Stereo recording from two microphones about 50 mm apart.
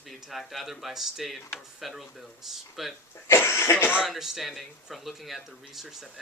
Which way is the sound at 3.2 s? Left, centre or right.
Left.